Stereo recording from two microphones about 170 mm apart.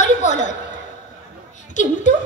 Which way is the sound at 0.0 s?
45° left (ahead or behind).